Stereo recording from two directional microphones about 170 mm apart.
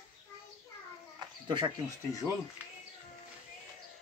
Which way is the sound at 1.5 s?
30° right (ahead or behind).